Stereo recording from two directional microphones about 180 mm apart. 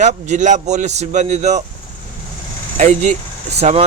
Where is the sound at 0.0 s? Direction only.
40° right (ahead or behind).